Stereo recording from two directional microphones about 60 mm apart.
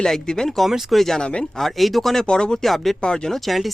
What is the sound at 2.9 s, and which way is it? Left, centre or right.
Speech, centre.